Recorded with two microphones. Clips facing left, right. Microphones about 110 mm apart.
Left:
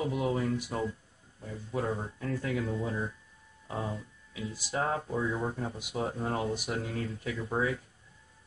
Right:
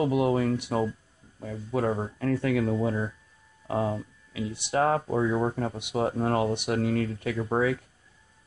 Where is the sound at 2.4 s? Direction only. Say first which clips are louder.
Right 6 dB; 70° right (ahead or behind).